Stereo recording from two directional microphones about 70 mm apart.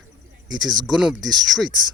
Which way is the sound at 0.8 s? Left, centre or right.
Centre.